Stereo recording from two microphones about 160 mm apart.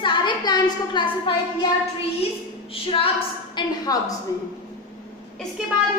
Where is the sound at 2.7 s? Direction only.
35° left (ahead or behind).